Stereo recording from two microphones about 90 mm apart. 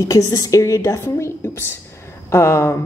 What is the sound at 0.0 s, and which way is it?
A woman's voice, 35° left (ahead or behind).